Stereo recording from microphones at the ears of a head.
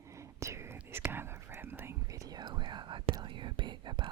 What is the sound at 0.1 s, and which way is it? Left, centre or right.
Whispering, right.